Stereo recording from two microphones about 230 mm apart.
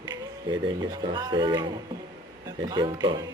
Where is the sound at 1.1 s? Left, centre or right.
Centre.